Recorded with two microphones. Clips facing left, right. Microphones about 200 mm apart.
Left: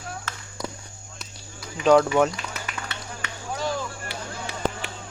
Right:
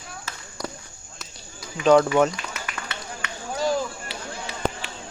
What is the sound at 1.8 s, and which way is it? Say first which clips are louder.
Speech: right 1 dB; centre (ahead or behind).